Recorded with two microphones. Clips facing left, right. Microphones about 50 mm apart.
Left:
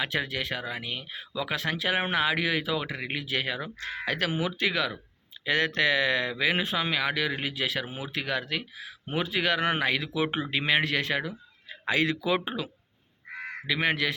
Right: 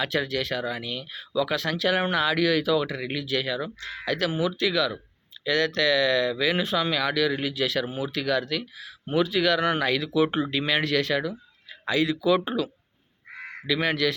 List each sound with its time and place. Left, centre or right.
0.0 s speech: left
10.2 s speech: centre
10.5 s a man's voice: left
12.0 s speech: left
12.5 s speech: centre